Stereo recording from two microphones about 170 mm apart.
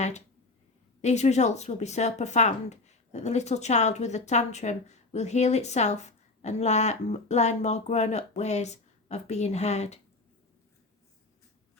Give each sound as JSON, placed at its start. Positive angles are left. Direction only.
{"t": 1.0, "sound": "speech", "side_deg": 40}